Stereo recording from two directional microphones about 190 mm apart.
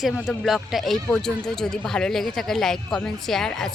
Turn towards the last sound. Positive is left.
turn(degrees=0)  # may be behind; listen again after turning